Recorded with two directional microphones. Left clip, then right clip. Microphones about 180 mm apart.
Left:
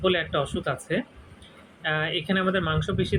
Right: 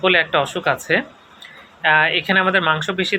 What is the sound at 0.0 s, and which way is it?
Speech, 20° left (ahead or behind).